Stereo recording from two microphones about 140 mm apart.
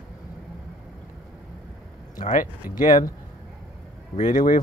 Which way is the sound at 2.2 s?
65° left (ahead or behind).